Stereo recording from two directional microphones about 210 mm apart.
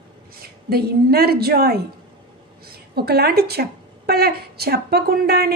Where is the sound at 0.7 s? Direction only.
45° right (ahead or behind).